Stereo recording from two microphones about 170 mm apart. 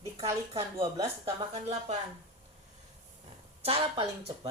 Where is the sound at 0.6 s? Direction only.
35° right (ahead or behind).